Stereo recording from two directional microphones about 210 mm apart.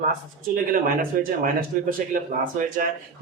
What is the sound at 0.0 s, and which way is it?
Speech, 40° right (ahead or behind).